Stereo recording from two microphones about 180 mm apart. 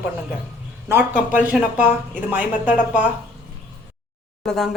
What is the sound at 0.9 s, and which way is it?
Speech, 10° right (ahead or behind).